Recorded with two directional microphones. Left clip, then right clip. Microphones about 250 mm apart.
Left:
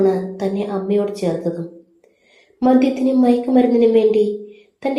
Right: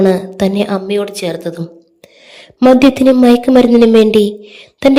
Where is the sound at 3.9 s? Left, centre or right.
Right.